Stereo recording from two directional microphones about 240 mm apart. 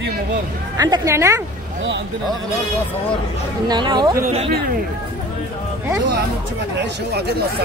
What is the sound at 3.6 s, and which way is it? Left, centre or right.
Speech, centre.